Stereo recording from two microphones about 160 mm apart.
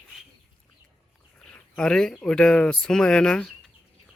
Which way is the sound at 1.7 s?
5° left (ahead or behind).